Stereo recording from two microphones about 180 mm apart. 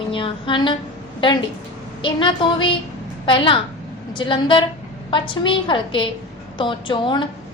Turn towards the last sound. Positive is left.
turn(degrees=25)  # may be behind; listen again after turning